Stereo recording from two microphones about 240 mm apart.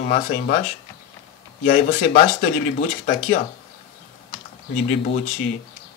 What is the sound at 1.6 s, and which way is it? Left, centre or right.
Speech, left.